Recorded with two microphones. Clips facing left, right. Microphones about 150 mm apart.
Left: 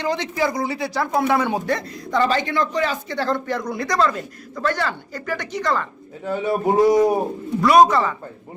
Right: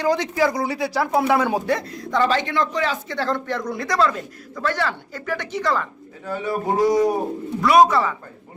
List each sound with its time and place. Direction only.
0.0 s speech: 10° right (ahead or behind)
6.2 s speech: 25° left (ahead or behind)
7.6 s speech: centre (ahead or behind)